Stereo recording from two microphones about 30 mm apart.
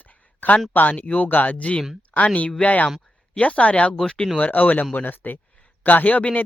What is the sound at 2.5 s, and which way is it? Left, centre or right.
Speech, left.